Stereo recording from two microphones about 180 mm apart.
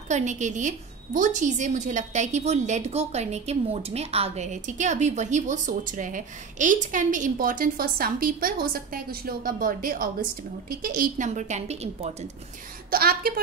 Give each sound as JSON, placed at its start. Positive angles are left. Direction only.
{"t": 0.1, "sound": "a woman's voice", "side_deg": -40}
{"t": 12.9, "sound": "a woman's voice", "side_deg": -55}